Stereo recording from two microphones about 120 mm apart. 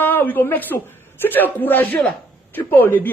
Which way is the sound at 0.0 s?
15° left (ahead or behind).